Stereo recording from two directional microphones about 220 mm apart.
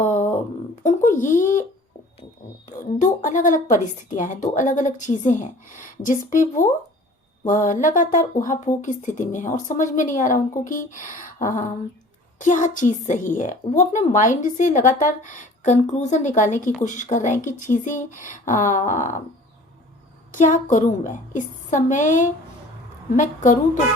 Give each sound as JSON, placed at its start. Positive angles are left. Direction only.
{"t": 0.0, "sound": "a sound", "side_deg": 35}
{"t": 2.6, "sound": "a woman's voice", "side_deg": 35}
{"t": 20.3, "sound": "a woman's voice", "side_deg": 35}